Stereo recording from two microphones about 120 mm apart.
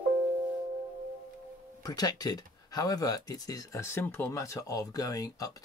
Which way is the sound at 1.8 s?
35° left (ahead or behind).